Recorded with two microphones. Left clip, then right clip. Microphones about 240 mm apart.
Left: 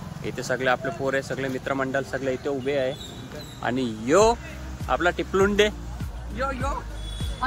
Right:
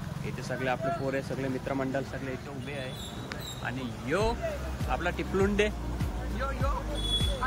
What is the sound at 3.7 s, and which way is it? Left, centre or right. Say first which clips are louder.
Speech: left 11 dB; centre.